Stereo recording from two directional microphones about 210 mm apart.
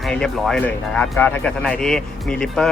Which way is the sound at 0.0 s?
Centre (ahead or behind).